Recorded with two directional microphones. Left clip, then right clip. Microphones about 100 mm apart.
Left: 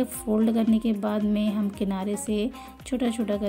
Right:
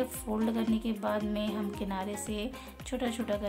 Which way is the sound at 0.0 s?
40° left (ahead or behind).